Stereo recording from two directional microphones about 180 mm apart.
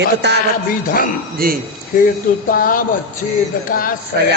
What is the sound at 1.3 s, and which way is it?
Speech, 55° right (ahead or behind).